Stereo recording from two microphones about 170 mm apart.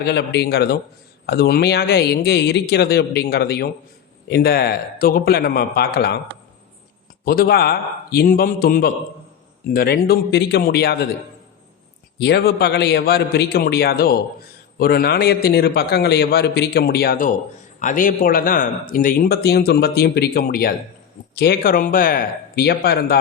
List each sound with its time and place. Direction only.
0.0 s a man's voice: 80° left
7.3 s a man's voice: 65° left (ahead or behind)
12.2 s a man's voice: 70° left (ahead or behind)